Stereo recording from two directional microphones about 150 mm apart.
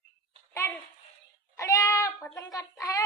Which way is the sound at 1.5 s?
20° left (ahead or behind).